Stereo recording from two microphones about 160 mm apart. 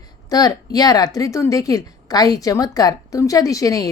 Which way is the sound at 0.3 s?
25° left (ahead or behind).